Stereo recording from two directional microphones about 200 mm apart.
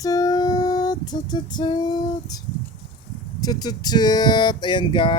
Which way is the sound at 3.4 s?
20° left (ahead or behind).